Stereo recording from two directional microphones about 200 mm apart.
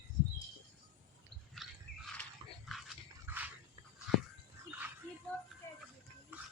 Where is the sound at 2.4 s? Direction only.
20° right (ahead or behind).